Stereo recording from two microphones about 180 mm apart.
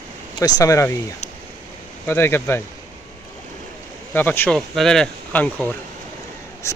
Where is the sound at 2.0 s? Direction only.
15° left (ahead or behind).